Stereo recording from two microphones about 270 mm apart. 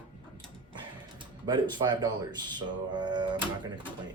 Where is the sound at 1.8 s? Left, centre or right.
Centre.